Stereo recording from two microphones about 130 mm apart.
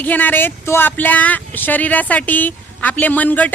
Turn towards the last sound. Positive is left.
turn(degrees=10)  # may be behind; listen again after turning